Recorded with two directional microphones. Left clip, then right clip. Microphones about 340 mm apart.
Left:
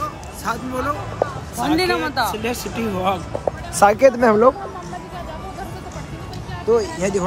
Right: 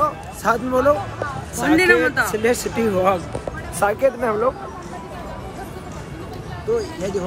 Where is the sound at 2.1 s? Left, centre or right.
Centre.